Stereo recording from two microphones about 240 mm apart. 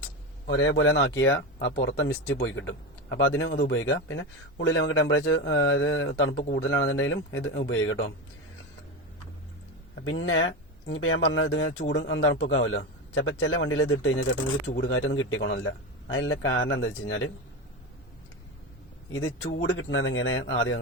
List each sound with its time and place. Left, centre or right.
0.4 s a man's voice: left
10.0 s a man's voice: left
19.1 s speech: left